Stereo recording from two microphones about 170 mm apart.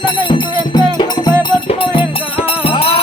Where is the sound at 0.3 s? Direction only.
25° left (ahead or behind).